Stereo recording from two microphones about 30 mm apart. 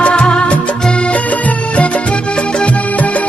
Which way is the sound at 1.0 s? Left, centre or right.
Left.